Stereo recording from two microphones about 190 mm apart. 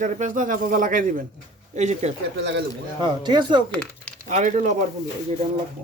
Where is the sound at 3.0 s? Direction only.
25° right (ahead or behind).